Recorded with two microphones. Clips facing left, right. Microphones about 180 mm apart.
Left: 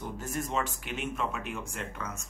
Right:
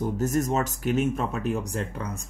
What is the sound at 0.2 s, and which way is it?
Speech, 45° right (ahead or behind).